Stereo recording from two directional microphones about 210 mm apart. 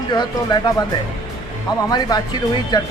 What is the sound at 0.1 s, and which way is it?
Speech, 20° left (ahead or behind).